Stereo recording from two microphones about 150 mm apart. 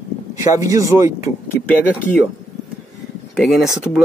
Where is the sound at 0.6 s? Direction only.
20° right (ahead or behind).